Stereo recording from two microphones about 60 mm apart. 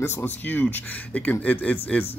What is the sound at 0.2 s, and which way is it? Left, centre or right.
Speech, left.